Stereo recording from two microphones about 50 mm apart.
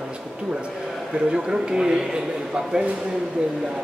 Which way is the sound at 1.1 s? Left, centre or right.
Centre.